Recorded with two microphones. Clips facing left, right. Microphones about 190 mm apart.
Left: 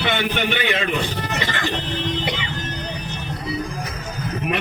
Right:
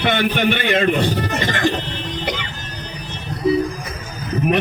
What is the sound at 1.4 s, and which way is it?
Music, 45° right (ahead or behind).